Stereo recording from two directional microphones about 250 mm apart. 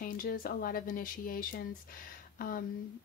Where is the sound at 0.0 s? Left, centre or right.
Left.